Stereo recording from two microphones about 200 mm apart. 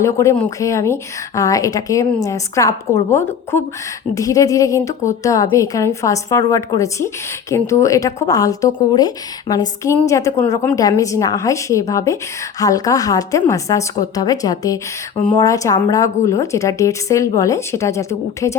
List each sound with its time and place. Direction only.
0.0 s a woman's voice: 15° left (ahead or behind)